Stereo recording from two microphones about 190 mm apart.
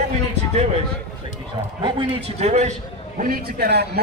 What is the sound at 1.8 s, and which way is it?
Speech, 25° right (ahead or behind).